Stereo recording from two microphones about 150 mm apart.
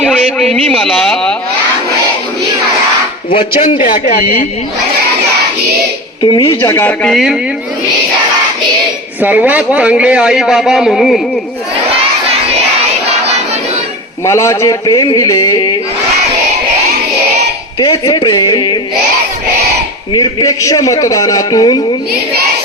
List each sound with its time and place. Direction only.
0.0 s speech: centre (ahead or behind)
3.8 s speech: 65° left (ahead or behind); by 4.4 s 90° left
6.2 s speech: 30° left (ahead or behind)
6.6 s speech: 15° left (ahead or behind)
7.0 s speech: centre (ahead or behind)
9.2 s a man's voice: 10° right (ahead or behind)
14.3 s a man's voice: 20° left (ahead or behind)
17.7 s a sound: 25° left (ahead or behind)
20.1 s a man's voice: 25° left (ahead or behind)